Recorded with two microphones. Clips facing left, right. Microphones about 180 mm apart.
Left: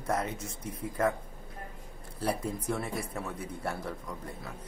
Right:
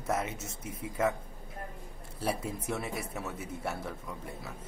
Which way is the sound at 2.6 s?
5° right (ahead or behind).